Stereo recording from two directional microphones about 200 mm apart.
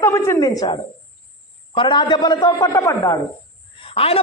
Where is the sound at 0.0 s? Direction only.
15° left (ahead or behind).